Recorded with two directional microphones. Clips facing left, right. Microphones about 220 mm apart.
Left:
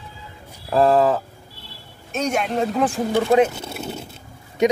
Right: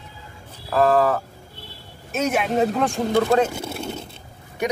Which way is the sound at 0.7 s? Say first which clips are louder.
Left 2 dB; 25° left (ahead or behind).